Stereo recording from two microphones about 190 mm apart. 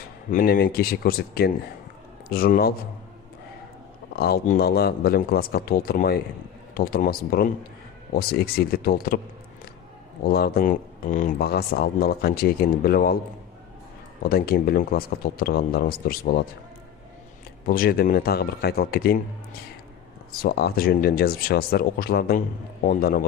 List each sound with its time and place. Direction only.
0.3 s speech: 45° left (ahead or behind)
4.1 s speech: 55° left (ahead or behind)
10.2 s speech: 55° left (ahead or behind)
14.2 s speech: 55° left (ahead or behind)
17.7 s speech: 50° left (ahead or behind)
20.4 s speech: 55° left (ahead or behind)